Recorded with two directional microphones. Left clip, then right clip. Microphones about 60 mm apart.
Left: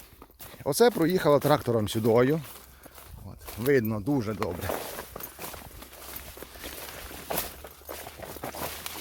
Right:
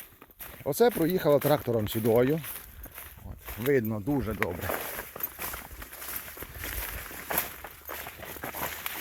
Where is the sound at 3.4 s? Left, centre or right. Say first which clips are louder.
Left 1 dB; centre.